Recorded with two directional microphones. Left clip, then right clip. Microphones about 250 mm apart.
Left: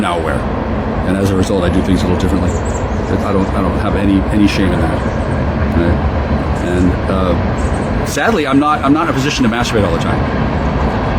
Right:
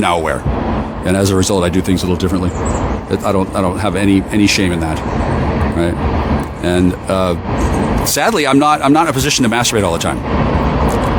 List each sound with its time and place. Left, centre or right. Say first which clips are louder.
1.2 s speech: right 2 dB; right
4.1 s speech: even; right
8.2 s speech: right 1 dB; right